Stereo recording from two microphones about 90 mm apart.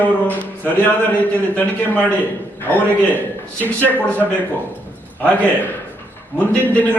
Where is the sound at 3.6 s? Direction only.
20° left (ahead or behind).